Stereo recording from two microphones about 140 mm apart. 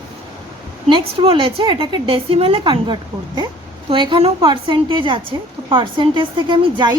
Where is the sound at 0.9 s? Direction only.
35° right (ahead or behind).